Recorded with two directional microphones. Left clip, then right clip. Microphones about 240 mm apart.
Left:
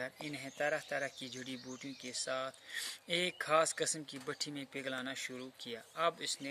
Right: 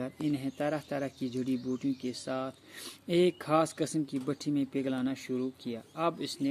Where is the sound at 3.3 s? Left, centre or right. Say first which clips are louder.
Right 3 dB; left.